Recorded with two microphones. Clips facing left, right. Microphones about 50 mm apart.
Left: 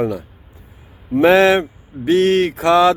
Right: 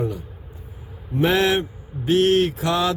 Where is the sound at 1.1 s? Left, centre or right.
Left.